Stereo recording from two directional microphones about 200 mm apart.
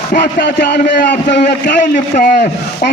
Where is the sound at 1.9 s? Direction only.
40° left (ahead or behind).